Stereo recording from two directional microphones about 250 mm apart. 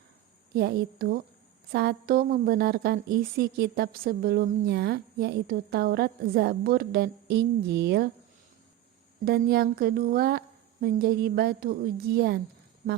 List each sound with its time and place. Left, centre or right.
0.5 s a woman's voice: right
9.2 s a woman's voice: right